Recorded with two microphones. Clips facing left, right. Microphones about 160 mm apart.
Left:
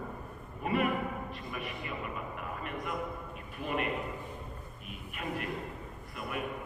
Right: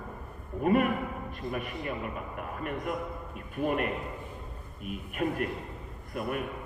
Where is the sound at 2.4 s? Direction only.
50° right (ahead or behind).